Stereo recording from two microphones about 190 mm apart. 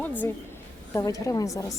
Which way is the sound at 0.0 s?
10° left (ahead or behind).